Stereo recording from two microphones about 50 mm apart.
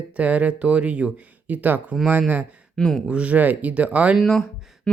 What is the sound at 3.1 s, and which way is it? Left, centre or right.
Speech, right.